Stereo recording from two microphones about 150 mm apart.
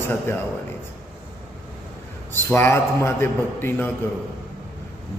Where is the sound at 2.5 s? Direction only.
15° left (ahead or behind).